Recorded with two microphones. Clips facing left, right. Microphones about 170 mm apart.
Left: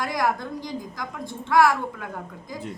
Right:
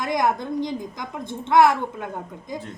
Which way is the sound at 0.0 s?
20° right (ahead or behind).